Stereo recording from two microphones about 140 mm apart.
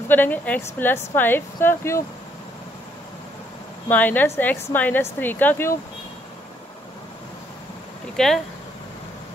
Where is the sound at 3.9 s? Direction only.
10° left (ahead or behind).